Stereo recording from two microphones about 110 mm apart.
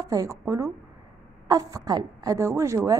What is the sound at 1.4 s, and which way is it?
A woman's voice, 35° right (ahead or behind).